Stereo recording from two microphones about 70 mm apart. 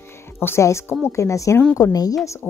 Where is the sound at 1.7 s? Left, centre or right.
Left.